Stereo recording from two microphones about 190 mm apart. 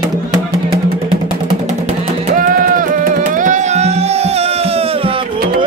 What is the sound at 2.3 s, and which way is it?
Music, 45° right (ahead or behind).